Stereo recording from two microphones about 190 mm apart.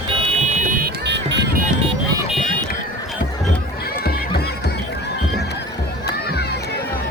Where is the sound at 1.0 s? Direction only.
65° right (ahead or behind).